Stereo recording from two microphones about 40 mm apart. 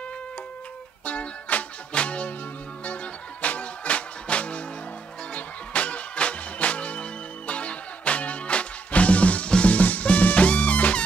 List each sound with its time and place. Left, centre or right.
1.0 s music: left
3.4 s music: left
9.8 s music: left